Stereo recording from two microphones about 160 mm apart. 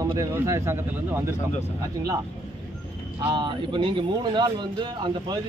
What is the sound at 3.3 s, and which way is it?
Speech, 30° right (ahead or behind).